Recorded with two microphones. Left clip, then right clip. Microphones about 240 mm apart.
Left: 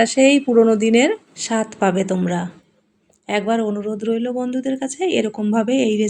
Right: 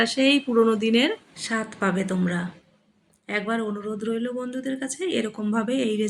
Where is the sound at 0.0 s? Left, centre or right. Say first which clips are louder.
Left 7 dB; centre.